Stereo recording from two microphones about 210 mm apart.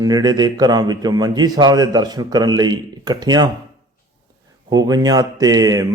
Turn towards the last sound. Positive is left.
turn(degrees=-15)  # may be behind; listen again after turning